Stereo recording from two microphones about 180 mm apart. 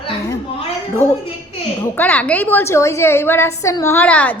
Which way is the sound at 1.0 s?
15° right (ahead or behind).